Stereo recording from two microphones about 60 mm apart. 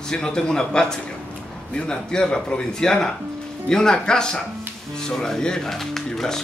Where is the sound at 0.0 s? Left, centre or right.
Centre.